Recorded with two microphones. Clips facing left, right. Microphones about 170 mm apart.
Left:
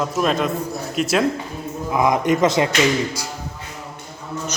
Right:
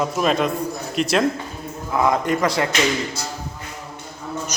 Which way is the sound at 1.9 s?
15° left (ahead or behind).